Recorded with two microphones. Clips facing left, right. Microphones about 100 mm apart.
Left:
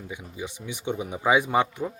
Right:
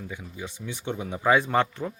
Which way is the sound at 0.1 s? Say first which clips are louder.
Left 2 dB; 15° left (ahead or behind).